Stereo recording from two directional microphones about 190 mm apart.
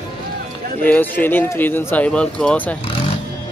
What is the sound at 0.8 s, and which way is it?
Speech, 10° left (ahead or behind).